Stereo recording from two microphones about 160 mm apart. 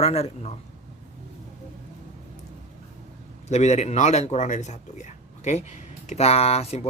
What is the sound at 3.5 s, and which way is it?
A man's voice, 45° left (ahead or behind).